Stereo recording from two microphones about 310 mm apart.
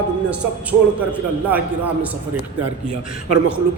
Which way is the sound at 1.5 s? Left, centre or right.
Centre.